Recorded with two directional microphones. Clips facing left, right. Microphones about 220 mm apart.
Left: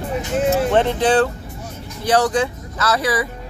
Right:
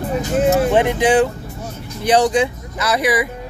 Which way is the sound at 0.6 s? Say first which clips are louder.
Right 1 dB; 10° right (ahead or behind).